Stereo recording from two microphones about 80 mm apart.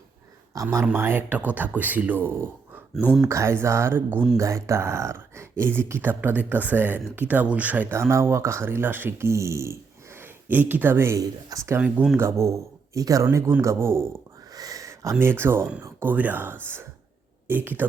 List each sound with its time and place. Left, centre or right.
0.5 s speech: right
4.4 s speech: right
11.2 s speech: right
12.1 s speech: right
13.6 s speech: right
14.5 s a sound: right
15.2 s speech: right